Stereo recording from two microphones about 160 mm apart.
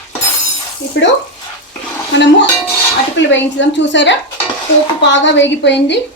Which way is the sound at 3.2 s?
90° left.